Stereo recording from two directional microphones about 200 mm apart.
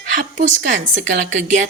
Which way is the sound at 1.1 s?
35° right (ahead or behind).